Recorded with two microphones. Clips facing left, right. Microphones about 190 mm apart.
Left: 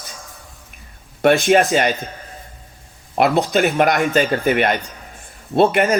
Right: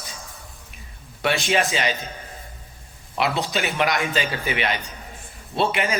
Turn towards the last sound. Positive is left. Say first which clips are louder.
# left 8 dB
turn(degrees=50)  # may be behind; listen again after turning